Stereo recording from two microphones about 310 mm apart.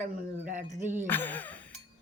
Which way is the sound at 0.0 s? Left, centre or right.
Right.